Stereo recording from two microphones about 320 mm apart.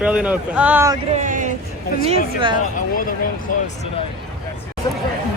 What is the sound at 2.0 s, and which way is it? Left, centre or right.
Speech, centre.